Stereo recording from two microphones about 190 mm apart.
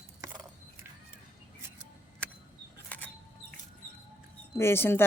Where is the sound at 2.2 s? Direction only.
5° left (ahead or behind).